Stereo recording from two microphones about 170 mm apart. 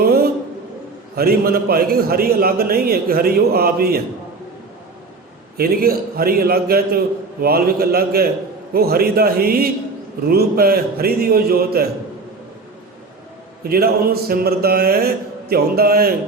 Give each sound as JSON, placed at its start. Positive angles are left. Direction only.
{"t": 0.0, "sound": "a sound", "side_deg": -60}
{"t": 1.1, "sound": "a man's voice", "side_deg": -65}
{"t": 5.5, "sound": "a man's voice", "side_deg": -60}
{"t": 13.7, "sound": "a man's voice", "side_deg": -65}